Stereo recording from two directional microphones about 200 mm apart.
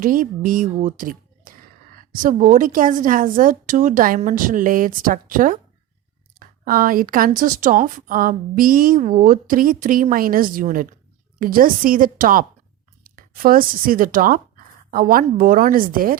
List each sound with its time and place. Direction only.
0.0 s a woman's voice: 45° right (ahead or behind)